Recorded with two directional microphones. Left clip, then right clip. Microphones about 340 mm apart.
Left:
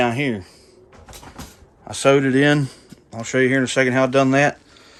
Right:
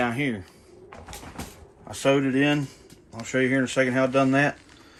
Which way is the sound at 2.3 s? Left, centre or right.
Left.